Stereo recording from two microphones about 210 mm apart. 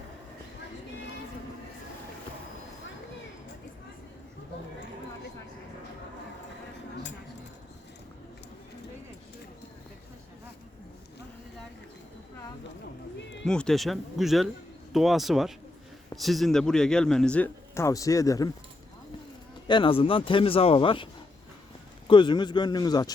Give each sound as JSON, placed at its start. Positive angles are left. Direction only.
{"t": 13.4, "sound": "speech", "side_deg": 5}
{"t": 19.6, "sound": "speech", "side_deg": 25}